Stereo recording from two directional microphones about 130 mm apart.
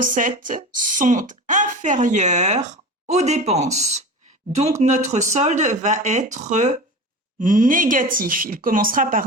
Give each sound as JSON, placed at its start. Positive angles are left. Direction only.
{"t": 0.0, "sound": "a woman's voice", "side_deg": -90}
{"t": 7.3, "sound": "speech", "side_deg": -90}